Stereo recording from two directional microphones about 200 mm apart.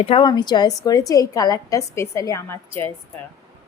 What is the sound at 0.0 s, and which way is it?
A woman's voice, 25° left (ahead or behind).